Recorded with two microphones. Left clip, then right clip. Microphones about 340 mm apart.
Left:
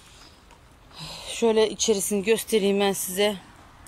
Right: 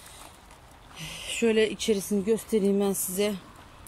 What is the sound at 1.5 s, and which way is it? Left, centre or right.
Speech, centre.